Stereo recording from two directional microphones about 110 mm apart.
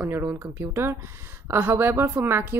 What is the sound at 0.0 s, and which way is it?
Speech, 20° right (ahead or behind).